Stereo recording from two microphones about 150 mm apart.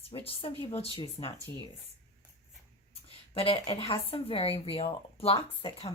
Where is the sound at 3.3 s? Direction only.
40° left (ahead or behind).